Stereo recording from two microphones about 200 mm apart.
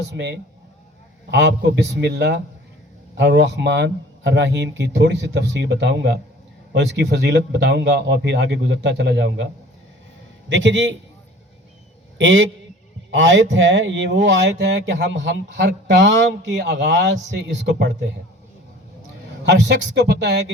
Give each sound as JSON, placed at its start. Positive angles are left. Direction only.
{"t": 0.1, "sound": "speech", "side_deg": -60}
{"t": 10.5, "sound": "speech", "side_deg": -65}
{"t": 12.1, "sound": "a man's voice", "side_deg": -65}
{"t": 19.5, "sound": "speech", "side_deg": -60}